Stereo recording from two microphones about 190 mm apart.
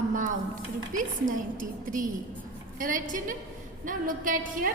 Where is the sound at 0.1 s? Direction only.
40° right (ahead or behind).